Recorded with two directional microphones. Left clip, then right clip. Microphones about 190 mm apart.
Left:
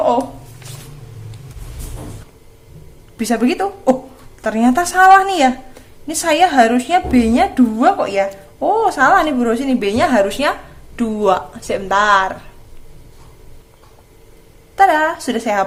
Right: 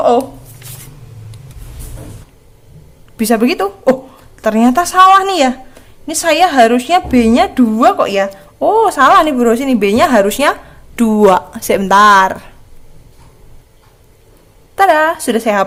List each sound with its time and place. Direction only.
3.2 s a woman's voice: 30° right (ahead or behind)
14.8 s a woman's voice: 35° right (ahead or behind)